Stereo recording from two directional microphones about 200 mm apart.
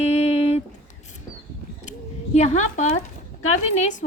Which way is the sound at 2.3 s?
35° left (ahead or behind).